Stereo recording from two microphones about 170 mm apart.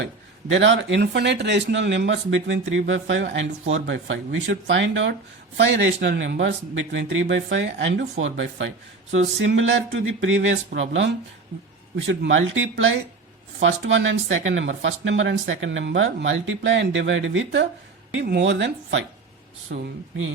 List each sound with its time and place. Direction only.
0.0 s speech: 90° right
19.7 s speech: 75° right (ahead or behind)